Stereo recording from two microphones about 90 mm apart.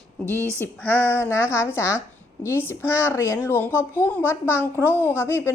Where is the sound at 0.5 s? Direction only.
20° left (ahead or behind).